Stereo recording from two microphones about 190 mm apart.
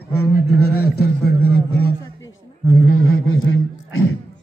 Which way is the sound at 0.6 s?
55° left (ahead or behind).